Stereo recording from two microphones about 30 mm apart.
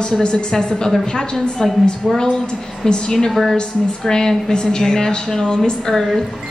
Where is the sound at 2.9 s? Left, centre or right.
Left.